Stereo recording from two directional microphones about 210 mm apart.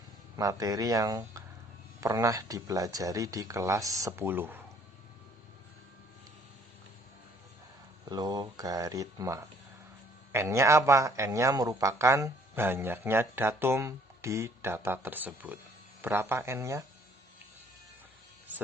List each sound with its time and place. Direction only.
0.3 s speech: 15° right (ahead or behind)
8.1 s speech: 20° right (ahead or behind)